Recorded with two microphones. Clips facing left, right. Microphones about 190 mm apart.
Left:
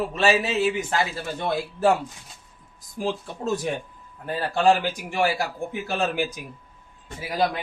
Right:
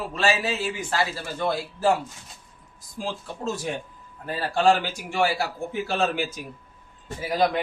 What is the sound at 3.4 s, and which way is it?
Speech, 20° left (ahead or behind).